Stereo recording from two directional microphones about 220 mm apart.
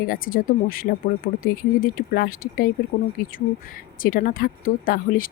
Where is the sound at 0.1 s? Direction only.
40° left (ahead or behind).